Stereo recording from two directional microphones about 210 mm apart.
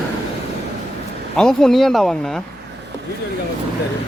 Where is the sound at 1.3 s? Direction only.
Centre (ahead or behind).